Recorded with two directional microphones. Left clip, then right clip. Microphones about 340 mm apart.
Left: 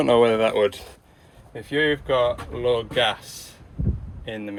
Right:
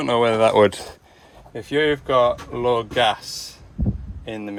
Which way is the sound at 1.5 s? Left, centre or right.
Centre.